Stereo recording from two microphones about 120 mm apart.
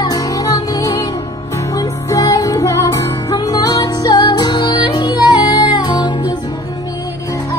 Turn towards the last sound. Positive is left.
turn(degrees=40)  # may be behind; listen again after turning